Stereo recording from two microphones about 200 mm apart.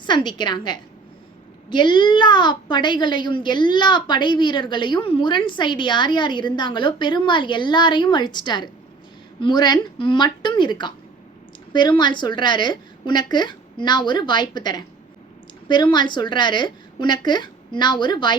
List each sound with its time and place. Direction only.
0.0 s a woman's voice: 25° left (ahead or behind)